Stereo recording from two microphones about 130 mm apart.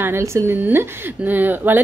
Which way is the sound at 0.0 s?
20° right (ahead or behind).